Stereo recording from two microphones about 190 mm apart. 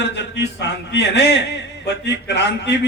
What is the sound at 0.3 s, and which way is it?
A man's voice, 65° left (ahead or behind).